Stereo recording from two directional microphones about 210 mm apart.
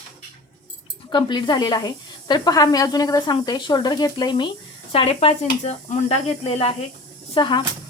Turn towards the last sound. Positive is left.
turn(degrees=25)  # may be behind; listen again after turning